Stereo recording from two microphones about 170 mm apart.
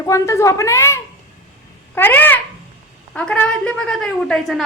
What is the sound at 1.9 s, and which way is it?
Cat, 10° left (ahead or behind).